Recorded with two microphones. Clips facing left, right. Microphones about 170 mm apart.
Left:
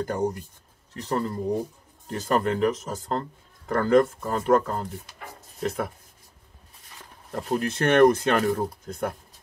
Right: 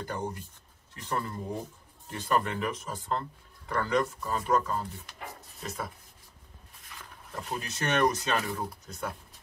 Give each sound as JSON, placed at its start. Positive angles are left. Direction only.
{"t": 0.0, "sound": "speech", "side_deg": 45}
{"t": 6.9, "sound": "a sound", "side_deg": 30}
{"t": 7.5, "sound": "speech", "side_deg": 55}